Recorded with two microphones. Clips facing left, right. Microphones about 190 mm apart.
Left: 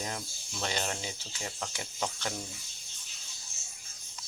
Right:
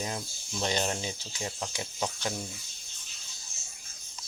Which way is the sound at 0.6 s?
20° right (ahead or behind).